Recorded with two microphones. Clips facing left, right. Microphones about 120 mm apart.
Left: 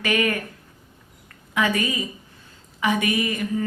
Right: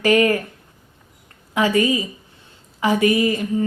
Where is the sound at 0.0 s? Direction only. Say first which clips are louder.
Right 7 dB; 30° right (ahead or behind).